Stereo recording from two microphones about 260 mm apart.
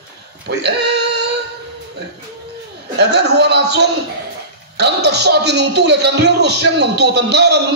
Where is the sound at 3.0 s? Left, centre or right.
Right.